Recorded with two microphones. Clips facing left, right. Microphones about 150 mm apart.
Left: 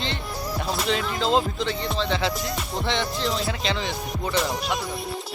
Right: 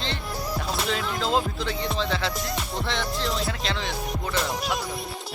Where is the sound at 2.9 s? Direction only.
Centre (ahead or behind).